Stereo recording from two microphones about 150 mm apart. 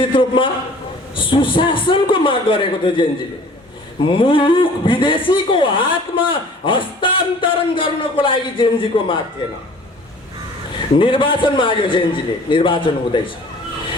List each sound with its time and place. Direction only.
0.0 s a sound: 35° left (ahead or behind)
4.0 s a man's voice: 35° left (ahead or behind)
10.8 s a man's voice: 35° left (ahead or behind)